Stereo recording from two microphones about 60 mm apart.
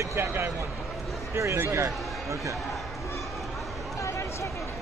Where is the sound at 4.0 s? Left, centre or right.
Left.